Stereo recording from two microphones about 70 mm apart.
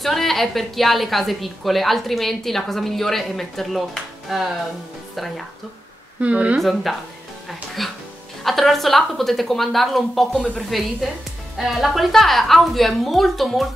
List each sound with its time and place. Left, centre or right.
0.0 s a woman's voice: centre
6.2 s speech: centre
6.6 s a woman's voice: centre